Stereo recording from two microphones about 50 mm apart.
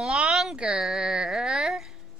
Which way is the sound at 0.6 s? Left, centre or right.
Centre.